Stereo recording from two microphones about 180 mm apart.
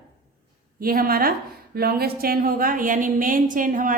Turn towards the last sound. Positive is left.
turn(degrees=-50)  # may be behind; listen again after turning